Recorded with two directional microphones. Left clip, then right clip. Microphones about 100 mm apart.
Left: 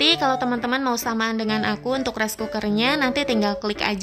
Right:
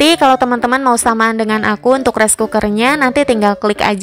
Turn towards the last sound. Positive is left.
turn(degrees=-65)  # may be behind; listen again after turning